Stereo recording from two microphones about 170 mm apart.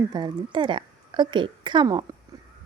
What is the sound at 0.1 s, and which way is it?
A woman's voice, 25° right (ahead or behind).